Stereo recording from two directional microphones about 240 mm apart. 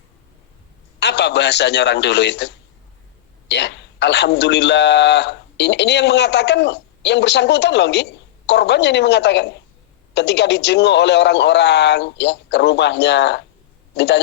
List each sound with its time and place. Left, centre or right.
0.9 s a man's voice: left
3.5 s a man's voice: left